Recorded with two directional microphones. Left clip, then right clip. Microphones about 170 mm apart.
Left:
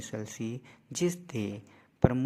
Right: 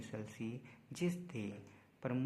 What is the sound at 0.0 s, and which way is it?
Speech, 35° left (ahead or behind).